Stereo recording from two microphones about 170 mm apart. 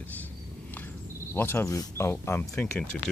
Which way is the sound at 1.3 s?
15° left (ahead or behind).